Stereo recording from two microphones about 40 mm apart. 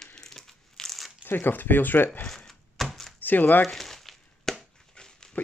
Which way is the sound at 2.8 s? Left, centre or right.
Centre.